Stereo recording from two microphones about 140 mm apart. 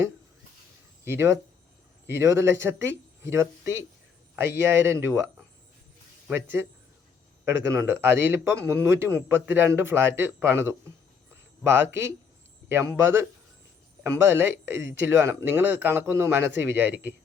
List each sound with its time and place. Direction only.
1.0 s speech: 20° right (ahead or behind)
6.3 s speech: 15° right (ahead or behind)